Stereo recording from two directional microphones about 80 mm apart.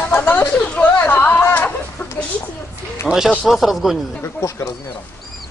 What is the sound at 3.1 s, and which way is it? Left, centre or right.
Speech, centre.